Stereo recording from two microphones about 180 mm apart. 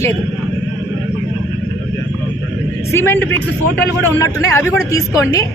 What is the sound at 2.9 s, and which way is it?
Speech, 15° left (ahead or behind).